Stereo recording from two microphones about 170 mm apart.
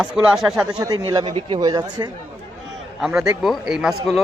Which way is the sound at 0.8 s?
20° right (ahead or behind).